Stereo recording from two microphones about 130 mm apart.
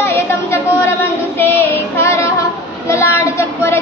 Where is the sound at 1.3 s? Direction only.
15° left (ahead or behind).